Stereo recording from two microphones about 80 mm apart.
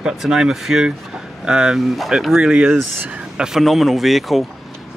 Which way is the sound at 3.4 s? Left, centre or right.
Centre.